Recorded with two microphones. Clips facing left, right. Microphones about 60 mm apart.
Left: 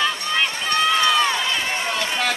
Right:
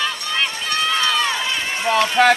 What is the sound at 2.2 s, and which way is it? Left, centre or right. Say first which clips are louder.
Speech: right 12 dB; right.